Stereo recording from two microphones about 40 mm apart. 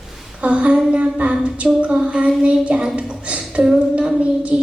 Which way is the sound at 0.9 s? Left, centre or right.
Right.